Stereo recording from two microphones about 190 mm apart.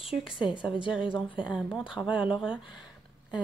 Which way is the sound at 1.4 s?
5° right (ahead or behind).